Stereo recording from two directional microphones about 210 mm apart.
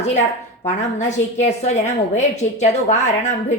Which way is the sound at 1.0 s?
35° left (ahead or behind).